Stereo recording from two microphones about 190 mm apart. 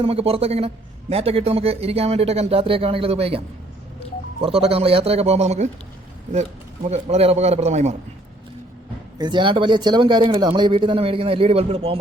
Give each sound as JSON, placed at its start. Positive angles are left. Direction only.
{"t": 0.0, "sound": "a man's voice", "side_deg": -30}
{"t": 9.1, "sound": "speech", "side_deg": -25}